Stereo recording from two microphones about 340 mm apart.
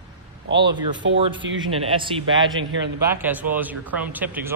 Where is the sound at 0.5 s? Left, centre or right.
Right.